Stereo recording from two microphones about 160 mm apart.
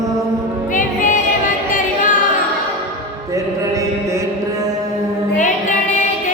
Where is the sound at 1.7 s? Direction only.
55° left (ahead or behind).